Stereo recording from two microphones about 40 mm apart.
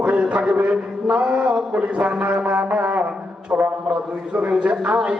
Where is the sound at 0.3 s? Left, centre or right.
Right.